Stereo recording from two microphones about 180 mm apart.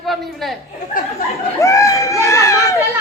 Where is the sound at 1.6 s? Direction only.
15° left (ahead or behind).